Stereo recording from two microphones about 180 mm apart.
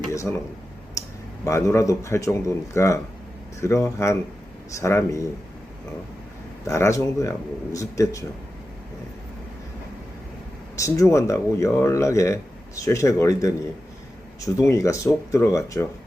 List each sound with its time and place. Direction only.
0.1 s speech: 15° left (ahead or behind)
1.0 s a sound: 15° left (ahead or behind)
1.5 s speech: 15° left (ahead or behind)
6.7 s speech: 15° left (ahead or behind)
10.8 s speech: 15° left (ahead or behind)